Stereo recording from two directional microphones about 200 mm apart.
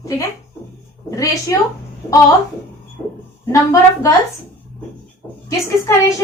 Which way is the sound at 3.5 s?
15° left (ahead or behind).